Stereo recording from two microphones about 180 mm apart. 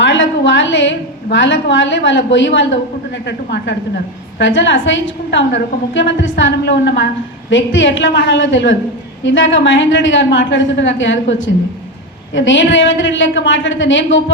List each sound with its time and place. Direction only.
0.0 s a woman's voice: 90° left
3.2 s a woman's voice: 70° left (ahead or behind)
7.5 s a woman's voice: 90° left